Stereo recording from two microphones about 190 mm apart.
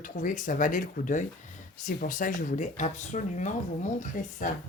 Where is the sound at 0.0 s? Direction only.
45° left (ahead or behind).